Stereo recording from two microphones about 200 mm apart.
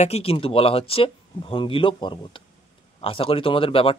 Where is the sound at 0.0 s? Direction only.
30° left (ahead or behind).